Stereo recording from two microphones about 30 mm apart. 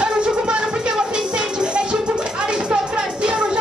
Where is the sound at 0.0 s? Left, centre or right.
Right.